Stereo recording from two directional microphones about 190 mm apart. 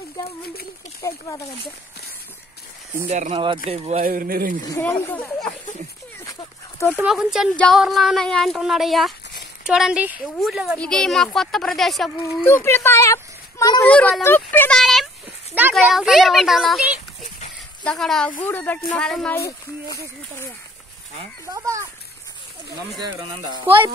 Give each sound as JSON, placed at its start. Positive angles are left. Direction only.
{"t": 1.0, "sound": "speech", "side_deg": 20}
{"t": 3.1, "sound": "speech", "side_deg": -35}
{"t": 4.0, "sound": "speech", "side_deg": -50}
{"t": 4.7, "sound": "speech", "side_deg": 10}
{"t": 7.0, "sound": "speech", "side_deg": -5}
{"t": 12.4, "sound": "speech", "side_deg": 15}
{"t": 13.8, "sound": "speech", "side_deg": 5}
{"t": 14.8, "sound": "a sound", "side_deg": 0}
{"t": 15.7, "sound": "speech", "side_deg": 0}
{"t": 21.5, "sound": "a child's voice", "side_deg": -15}